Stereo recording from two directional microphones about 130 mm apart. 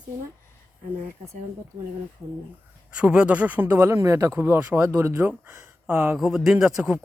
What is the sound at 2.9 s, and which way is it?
Speech, 10° right (ahead or behind).